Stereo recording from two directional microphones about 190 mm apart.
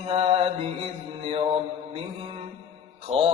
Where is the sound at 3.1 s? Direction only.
30° right (ahead or behind).